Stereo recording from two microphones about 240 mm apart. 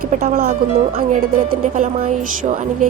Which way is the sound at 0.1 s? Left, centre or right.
Right.